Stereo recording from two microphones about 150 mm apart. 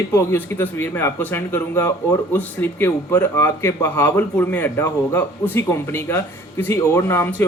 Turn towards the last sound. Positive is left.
turn(degrees=15)  # may be behind; listen again after turning